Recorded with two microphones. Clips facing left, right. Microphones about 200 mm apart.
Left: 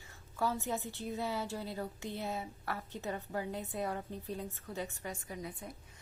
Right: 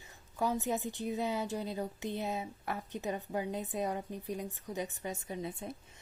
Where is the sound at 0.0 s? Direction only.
20° right (ahead or behind).